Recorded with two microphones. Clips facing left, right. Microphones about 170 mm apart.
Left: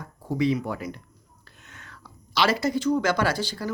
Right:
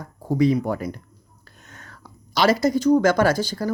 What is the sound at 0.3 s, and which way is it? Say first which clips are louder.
Speech: right 5 dB; 40° right (ahead or behind).